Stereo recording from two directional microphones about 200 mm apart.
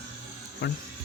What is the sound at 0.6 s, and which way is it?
Speech, 55° left (ahead or behind).